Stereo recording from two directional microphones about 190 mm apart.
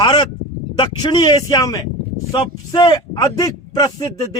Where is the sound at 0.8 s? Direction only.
25° left (ahead or behind).